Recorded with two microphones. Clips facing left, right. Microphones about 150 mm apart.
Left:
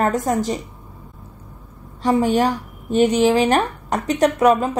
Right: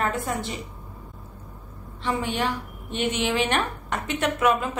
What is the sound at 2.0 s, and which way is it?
A woman's voice, 40° left (ahead or behind).